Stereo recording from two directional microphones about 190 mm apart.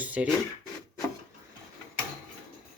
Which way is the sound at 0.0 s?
5° right (ahead or behind).